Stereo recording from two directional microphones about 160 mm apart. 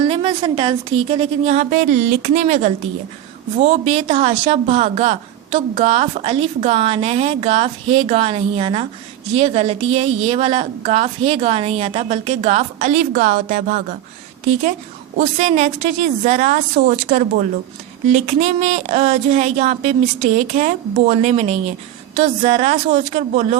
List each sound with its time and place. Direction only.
0.0 s a woman's voice: 35° right (ahead or behind)